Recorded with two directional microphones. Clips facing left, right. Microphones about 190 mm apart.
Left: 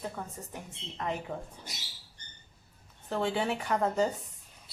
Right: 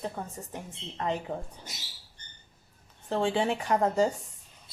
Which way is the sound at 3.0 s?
30° right (ahead or behind).